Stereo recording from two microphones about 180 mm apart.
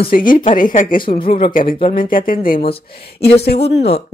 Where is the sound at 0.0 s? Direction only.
50° left (ahead or behind).